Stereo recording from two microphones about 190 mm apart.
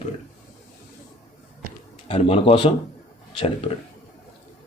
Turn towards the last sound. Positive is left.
turn(degrees=30)  # may be behind; listen again after turning